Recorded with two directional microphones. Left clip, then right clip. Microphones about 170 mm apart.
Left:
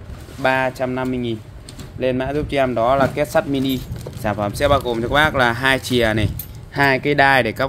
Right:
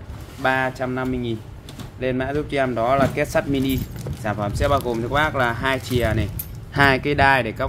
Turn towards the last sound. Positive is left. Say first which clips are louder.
# left 3 dB
turn(degrees=45)  # may be behind; listen again after turning